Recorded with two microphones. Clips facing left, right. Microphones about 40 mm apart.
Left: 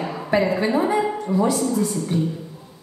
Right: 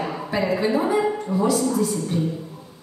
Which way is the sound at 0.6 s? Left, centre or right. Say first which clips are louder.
Left 1 dB; centre.